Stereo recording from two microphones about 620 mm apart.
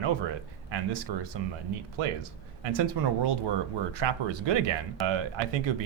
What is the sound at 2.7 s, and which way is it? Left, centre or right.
Speech, right.